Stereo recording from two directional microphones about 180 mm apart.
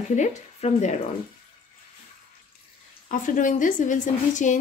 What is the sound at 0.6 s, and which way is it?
Speech, 40° left (ahead or behind).